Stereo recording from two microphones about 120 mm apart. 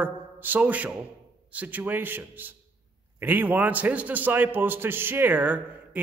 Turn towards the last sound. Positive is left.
turn(degrees=-15)  # may be behind; listen again after turning